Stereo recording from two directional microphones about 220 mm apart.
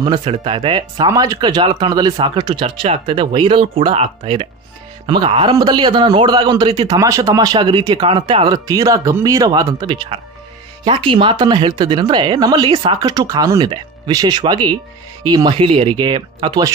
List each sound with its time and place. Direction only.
0.0 s a man's voice: 20° right (ahead or behind)